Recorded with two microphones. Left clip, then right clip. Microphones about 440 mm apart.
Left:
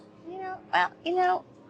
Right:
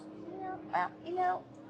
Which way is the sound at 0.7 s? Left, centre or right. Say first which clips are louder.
Left 9 dB; left.